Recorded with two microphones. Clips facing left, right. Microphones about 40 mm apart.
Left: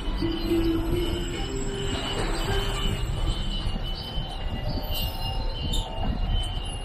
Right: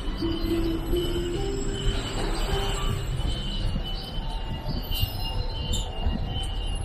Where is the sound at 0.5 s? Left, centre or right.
Left.